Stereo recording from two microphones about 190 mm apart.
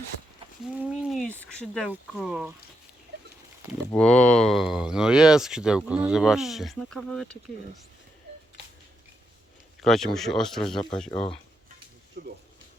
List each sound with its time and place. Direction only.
0.6 s a sound: 5° right (ahead or behind)
1.9 s speech: 5° right (ahead or behind)
3.9 s speech: 5° left (ahead or behind)
9.8 s speech: centre (ahead or behind)
11.1 s speech: 30° left (ahead or behind)
12.2 s speech: 50° right (ahead or behind)